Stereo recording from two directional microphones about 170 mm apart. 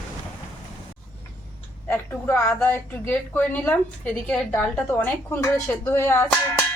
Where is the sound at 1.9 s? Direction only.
10° left (ahead or behind).